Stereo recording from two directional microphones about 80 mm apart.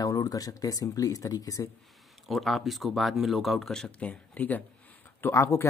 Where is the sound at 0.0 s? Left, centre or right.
Left.